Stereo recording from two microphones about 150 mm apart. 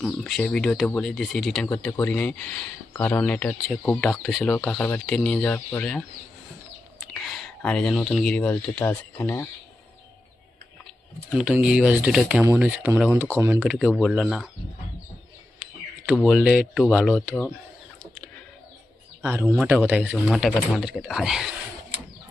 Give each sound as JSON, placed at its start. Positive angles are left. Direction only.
{"t": 0.0, "sound": "speech", "side_deg": 5}
{"t": 4.7, "sound": "speech", "side_deg": 10}
{"t": 7.1, "sound": "speech", "side_deg": 5}
{"t": 11.3, "sound": "speech", "side_deg": -5}
{"t": 13.7, "sound": "speech", "side_deg": -5}
{"t": 16.0, "sound": "speech", "side_deg": 0}
{"t": 19.2, "sound": "speech", "side_deg": -10}